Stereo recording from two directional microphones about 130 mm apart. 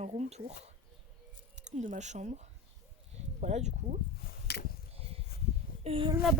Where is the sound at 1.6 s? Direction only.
65° right (ahead or behind).